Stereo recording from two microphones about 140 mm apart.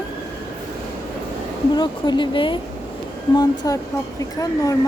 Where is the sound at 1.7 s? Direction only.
35° left (ahead or behind).